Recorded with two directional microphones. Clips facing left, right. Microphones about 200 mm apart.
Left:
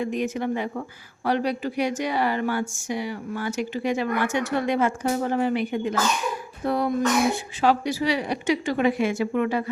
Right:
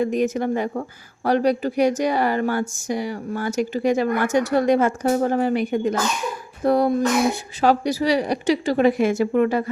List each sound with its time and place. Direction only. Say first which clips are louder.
0.0 s speech: right 5 dB; 40° right (ahead or behind)